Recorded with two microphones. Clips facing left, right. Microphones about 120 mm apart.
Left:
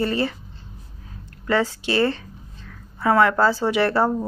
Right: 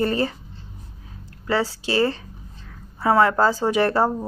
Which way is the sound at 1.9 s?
35° right (ahead or behind).